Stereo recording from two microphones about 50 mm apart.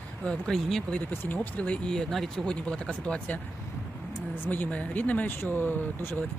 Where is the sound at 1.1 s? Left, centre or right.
Left.